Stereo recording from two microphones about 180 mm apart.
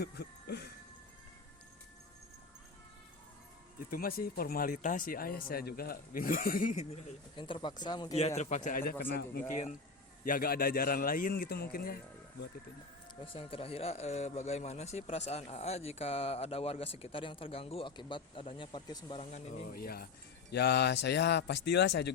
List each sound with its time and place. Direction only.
0.0 s music: 60° left (ahead or behind)
3.8 s speech: 55° left (ahead or behind); by 8.1 s 25° left (ahead or behind)
8.4 s speech: 45° left (ahead or behind)
13.2 s speech: 30° left (ahead or behind)
19.7 s speech: 55° left (ahead or behind)
20.5 s speech: 70° left (ahead or behind)